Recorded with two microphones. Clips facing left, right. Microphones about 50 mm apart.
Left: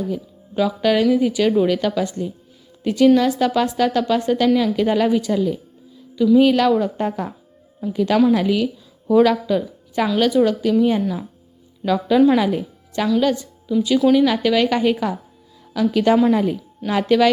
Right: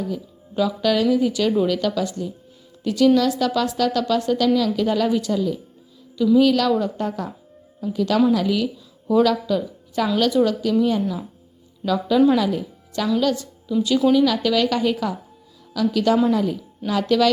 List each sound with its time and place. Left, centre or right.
0.1 s a woman's voice: left
13.1 s a woman's voice: centre